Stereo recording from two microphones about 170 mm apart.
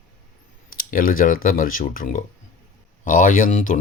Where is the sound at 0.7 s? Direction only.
55° left (ahead or behind).